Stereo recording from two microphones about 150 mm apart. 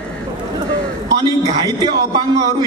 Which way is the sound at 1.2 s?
25° right (ahead or behind).